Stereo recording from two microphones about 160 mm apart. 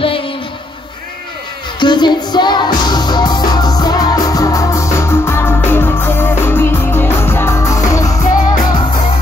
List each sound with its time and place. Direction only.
1.8 s music: 30° left (ahead or behind)